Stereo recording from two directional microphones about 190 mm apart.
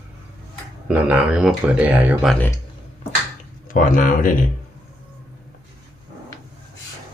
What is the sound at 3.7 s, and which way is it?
Speech, 45° left (ahead or behind).